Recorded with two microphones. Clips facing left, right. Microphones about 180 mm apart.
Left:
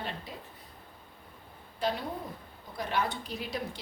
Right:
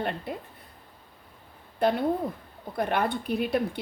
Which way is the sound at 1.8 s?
55° right (ahead or behind).